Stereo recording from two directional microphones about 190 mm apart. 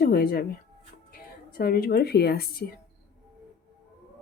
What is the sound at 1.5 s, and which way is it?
Speech, 50° left (ahead or behind).